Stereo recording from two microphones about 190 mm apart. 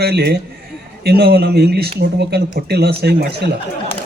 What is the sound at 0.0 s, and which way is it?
Speech, 55° right (ahead or behind).